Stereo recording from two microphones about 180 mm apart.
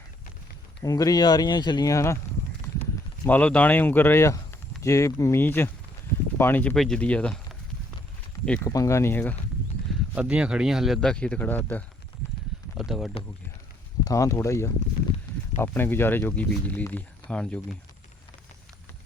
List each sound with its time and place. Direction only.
0.8 s speech: 20° left (ahead or behind)
3.2 s speech: 10° left (ahead or behind)
8.4 s speech: 5° left (ahead or behind)
8.7 s speech: 15° left (ahead or behind)
10.2 s speech: 5° right (ahead or behind); by 11.8 s 10° left (ahead or behind)
12.7 s speech: centre (ahead or behind)
14.0 s speech: 20° left (ahead or behind)